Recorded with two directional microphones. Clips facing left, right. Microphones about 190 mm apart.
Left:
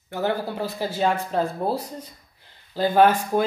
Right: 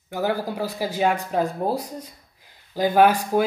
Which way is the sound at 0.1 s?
10° right (ahead or behind).